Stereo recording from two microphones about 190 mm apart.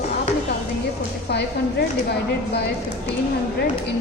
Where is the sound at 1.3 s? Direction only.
60° left (ahead or behind).